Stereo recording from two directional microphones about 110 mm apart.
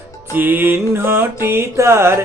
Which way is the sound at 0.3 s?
20° right (ahead or behind).